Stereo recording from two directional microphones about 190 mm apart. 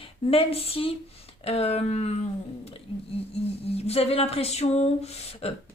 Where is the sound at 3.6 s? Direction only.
30° left (ahead or behind).